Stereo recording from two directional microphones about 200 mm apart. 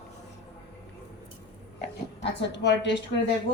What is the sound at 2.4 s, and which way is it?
Speech, 60° left (ahead or behind).